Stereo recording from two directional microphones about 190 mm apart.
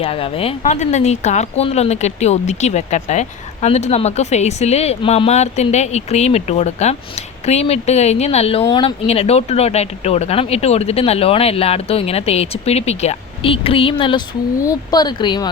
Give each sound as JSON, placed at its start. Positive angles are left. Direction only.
{"t": 0.0, "sound": "speech", "side_deg": 30}